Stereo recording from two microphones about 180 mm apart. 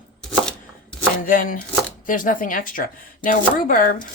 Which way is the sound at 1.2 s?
50° left (ahead or behind).